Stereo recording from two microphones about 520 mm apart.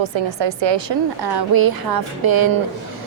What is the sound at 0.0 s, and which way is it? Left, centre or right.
A woman's voice, right.